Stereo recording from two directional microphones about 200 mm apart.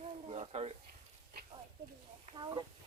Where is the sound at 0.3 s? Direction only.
30° right (ahead or behind).